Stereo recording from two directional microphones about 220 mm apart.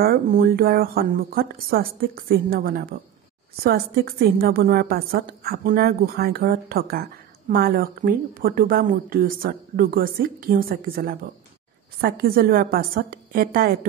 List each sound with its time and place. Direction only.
0.0 s a woman's voice: 45° right (ahead or behind)